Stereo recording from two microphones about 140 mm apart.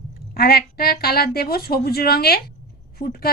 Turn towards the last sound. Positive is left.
turn(degrees=90)